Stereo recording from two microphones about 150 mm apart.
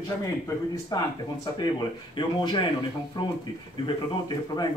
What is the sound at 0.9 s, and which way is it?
Speech, 25° left (ahead or behind).